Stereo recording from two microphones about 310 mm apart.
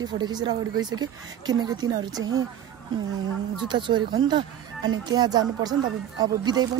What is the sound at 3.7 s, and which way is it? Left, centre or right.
Speech, centre.